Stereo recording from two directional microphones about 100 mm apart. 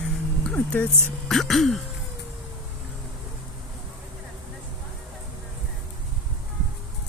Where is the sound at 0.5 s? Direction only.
15° left (ahead or behind).